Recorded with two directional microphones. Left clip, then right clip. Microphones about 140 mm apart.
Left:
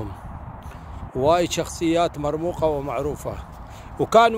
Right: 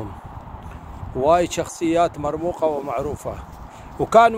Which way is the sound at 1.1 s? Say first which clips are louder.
Right 2 dB; 30° left (ahead or behind).